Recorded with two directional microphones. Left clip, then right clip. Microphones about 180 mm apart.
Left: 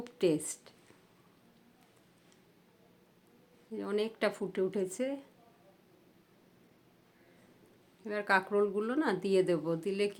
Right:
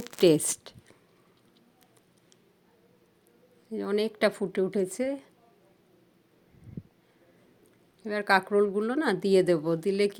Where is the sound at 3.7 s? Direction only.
35° right (ahead or behind).